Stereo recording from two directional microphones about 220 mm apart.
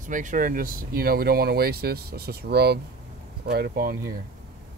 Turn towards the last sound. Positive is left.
turn(degrees=-45)  # may be behind; listen again after turning